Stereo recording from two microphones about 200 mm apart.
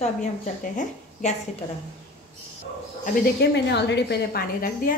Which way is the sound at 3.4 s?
55° left (ahead or behind).